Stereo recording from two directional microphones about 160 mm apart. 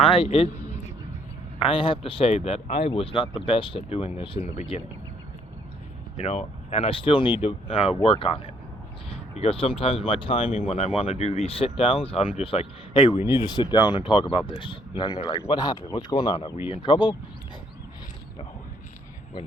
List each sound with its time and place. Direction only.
0.0 s a man's voice: 35° left (ahead or behind)
6.1 s speech: 40° left (ahead or behind)